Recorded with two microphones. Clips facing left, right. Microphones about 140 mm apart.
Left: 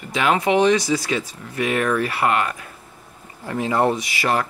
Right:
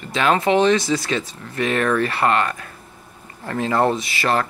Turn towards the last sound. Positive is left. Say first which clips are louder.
# right 1 dB
turn(degrees=15)  # may be behind; listen again after turning